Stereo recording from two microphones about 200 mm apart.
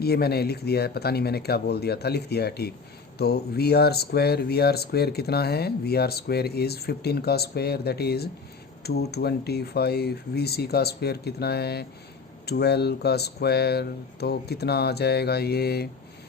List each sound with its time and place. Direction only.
0.0 s speech: 50° left (ahead or behind)